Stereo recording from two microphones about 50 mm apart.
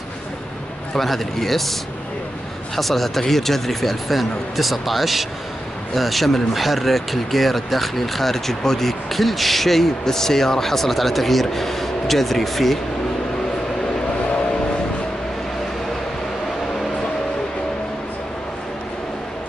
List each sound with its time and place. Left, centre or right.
0.9 s speech: centre